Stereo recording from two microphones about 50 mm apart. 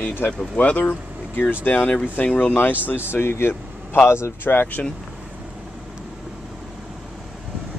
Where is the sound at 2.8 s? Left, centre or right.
Left.